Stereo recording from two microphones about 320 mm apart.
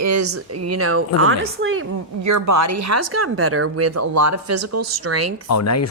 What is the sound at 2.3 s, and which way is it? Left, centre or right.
Speech, right.